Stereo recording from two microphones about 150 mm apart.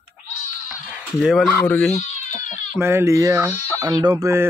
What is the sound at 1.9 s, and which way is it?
Crying, 50° left (ahead or behind).